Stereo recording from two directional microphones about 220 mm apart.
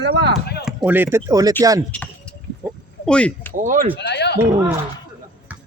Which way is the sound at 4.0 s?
50° left (ahead or behind).